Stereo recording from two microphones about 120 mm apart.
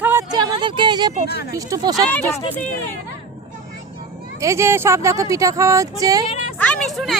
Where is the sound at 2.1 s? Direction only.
15° left (ahead or behind).